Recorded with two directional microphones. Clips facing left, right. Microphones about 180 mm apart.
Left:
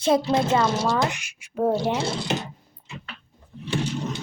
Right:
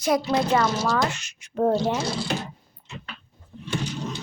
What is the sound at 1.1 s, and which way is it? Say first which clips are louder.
Speech: right 1 dB; 10° left (ahead or behind).